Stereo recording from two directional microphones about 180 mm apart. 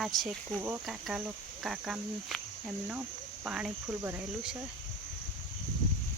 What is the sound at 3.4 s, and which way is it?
Speech, 5° right (ahead or behind).